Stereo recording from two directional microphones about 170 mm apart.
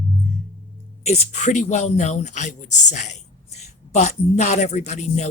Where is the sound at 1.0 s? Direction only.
40° left (ahead or behind).